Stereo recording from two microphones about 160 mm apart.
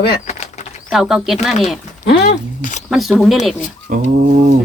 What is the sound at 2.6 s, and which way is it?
Speech, 50° left (ahead or behind).